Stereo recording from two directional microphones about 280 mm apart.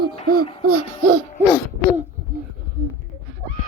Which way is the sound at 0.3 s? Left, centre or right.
Right.